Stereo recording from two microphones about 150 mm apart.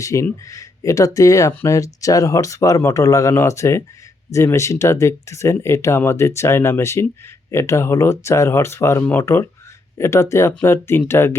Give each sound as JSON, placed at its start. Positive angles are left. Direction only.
{"t": 0.0, "sound": "speech", "side_deg": 20}